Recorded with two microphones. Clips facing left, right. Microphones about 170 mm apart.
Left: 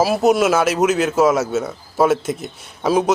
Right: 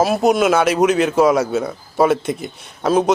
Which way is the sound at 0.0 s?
5° left (ahead or behind).